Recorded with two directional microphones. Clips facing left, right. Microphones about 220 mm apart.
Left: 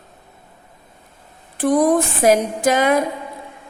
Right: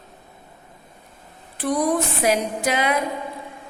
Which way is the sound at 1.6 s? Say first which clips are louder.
Left 6 dB; 50° left (ahead or behind).